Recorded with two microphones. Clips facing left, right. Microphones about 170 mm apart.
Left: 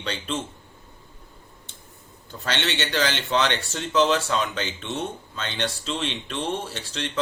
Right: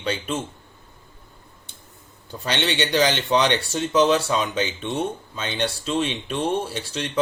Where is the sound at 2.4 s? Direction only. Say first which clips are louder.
Right 3 dB; 15° right (ahead or behind).